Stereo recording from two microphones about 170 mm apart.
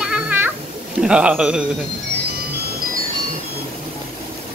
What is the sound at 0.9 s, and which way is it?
Speech, 5° right (ahead or behind).